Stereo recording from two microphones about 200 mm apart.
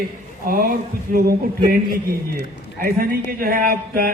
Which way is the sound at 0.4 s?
50° right (ahead or behind).